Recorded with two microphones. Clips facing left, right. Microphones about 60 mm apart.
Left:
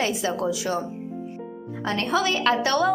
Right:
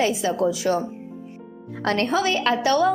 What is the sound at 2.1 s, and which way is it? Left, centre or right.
Speech, right.